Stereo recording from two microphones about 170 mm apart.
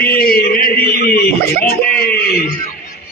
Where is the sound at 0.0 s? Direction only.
60° left (ahead or behind).